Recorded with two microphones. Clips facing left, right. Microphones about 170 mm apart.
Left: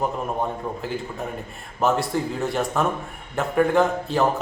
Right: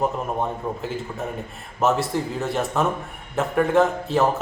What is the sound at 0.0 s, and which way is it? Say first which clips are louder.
Speech: right 1 dB; centre (ahead or behind).